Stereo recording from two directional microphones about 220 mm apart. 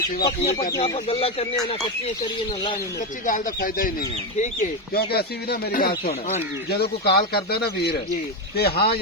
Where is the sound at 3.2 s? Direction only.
40° left (ahead or behind).